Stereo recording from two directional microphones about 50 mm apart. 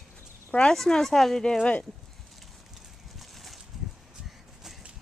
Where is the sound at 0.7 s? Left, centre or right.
Centre.